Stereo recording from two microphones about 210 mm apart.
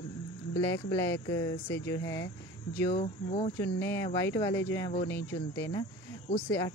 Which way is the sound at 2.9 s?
30° left (ahead or behind).